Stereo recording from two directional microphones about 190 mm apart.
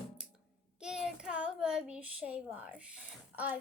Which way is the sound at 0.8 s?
5° right (ahead or behind).